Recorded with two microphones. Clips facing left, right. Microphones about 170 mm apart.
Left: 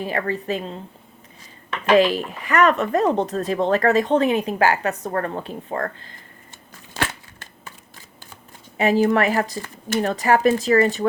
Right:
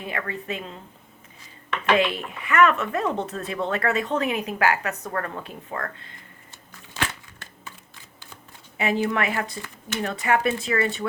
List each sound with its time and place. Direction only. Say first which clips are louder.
0.0 s speech: left 7 dB; 35° left (ahead or behind)
1.9 s speech: left 6 dB; 35° left (ahead or behind)
8.8 s speech: left 6 dB; 40° left (ahead or behind)